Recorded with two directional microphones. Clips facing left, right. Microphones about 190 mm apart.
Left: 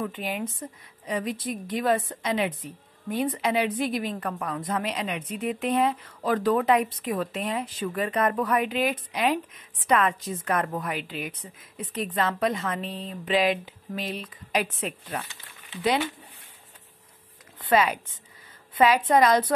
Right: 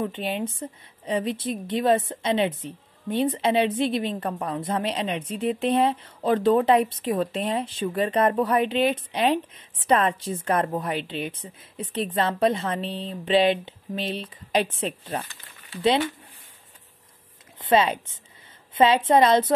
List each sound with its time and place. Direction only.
0.0 s a woman's voice: 25° right (ahead or behind)
17.6 s a woman's voice: 25° right (ahead or behind)